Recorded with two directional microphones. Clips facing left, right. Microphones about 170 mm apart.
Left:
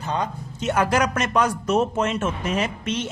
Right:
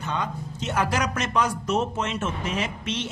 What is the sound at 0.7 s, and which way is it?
Speech, 55° left (ahead or behind).